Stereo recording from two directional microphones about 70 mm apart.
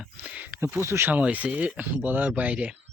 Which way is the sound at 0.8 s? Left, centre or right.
Right.